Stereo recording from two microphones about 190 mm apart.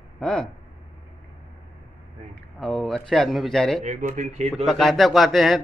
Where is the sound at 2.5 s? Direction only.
Centre (ahead or behind).